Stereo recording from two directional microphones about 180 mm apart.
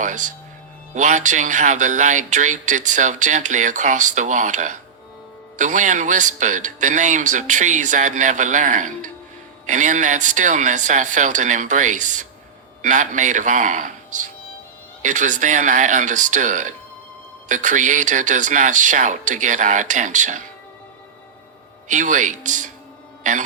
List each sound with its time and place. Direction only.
0.9 s speech: 45° right (ahead or behind)
21.8 s speech: 45° right (ahead or behind)